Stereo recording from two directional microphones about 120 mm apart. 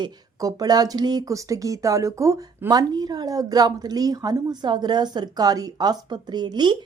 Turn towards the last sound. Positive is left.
turn(degrees=-40)  # may be behind; listen again after turning